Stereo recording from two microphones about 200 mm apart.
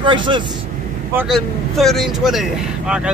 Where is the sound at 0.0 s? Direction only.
25° right (ahead or behind).